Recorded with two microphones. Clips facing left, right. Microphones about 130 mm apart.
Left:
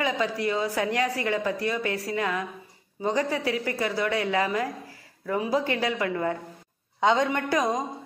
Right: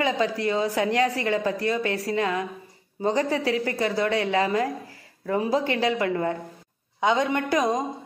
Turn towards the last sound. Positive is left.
turn(degrees=-20)  # may be behind; listen again after turning